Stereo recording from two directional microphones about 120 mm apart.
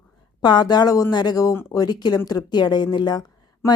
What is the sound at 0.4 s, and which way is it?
Speech, 35° left (ahead or behind).